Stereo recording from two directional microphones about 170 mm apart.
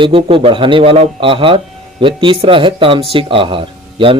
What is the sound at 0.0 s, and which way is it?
Speech, 30° right (ahead or behind).